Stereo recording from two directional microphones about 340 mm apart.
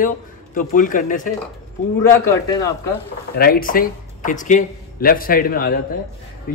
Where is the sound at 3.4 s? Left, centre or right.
Left.